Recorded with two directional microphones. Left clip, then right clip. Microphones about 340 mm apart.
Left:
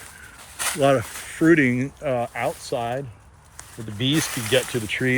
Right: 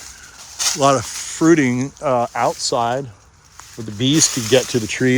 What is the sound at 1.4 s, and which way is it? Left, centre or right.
Speech, centre.